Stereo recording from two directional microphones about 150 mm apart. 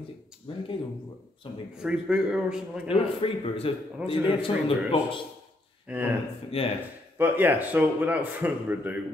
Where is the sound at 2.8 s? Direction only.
40° left (ahead or behind).